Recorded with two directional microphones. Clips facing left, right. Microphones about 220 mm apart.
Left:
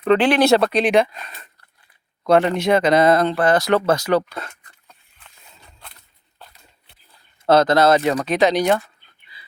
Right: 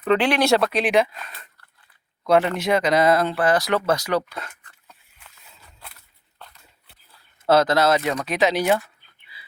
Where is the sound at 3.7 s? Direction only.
30° left (ahead or behind).